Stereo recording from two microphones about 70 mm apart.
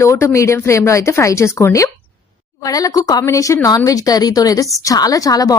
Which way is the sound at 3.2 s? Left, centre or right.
Left.